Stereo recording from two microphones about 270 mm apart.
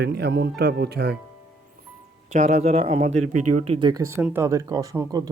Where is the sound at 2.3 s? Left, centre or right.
Right.